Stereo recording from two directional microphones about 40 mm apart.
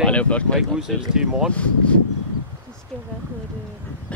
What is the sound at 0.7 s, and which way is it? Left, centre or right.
Speech, centre.